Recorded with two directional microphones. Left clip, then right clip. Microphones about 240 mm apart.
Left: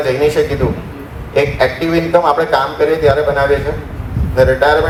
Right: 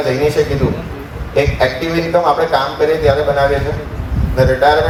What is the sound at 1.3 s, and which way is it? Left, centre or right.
A man's voice, centre.